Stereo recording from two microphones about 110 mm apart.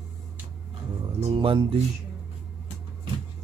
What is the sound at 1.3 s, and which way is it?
Speech, 55° right (ahead or behind).